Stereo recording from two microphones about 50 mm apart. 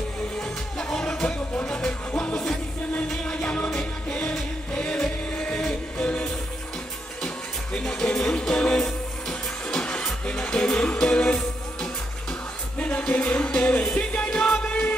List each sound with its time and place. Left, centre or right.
0.4 s music: centre
7.2 s music: centre
12.7 s music: left